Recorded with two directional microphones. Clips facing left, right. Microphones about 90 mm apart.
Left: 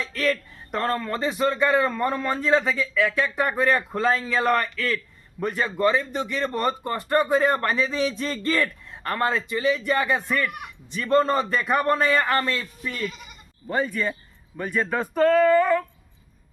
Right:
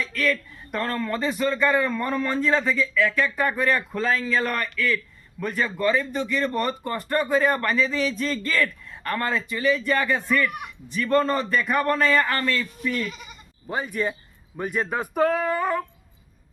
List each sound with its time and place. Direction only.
0.0 s speech: 30° left (ahead or behind)
13.7 s speech: 10° right (ahead or behind)